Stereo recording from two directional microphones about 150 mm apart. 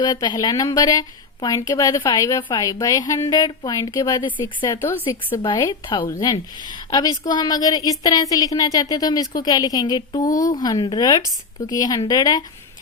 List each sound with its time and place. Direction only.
0.0 s a woman's voice: 30° left (ahead or behind)
4.8 s a woman's voice: 15° left (ahead or behind)
5.4 s a woman's voice: 30° left (ahead or behind)